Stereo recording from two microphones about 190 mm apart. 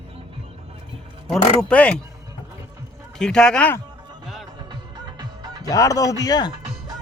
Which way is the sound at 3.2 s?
5° left (ahead or behind).